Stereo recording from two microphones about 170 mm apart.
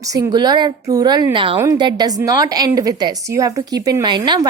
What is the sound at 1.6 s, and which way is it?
A woman's voice, 20° right (ahead or behind).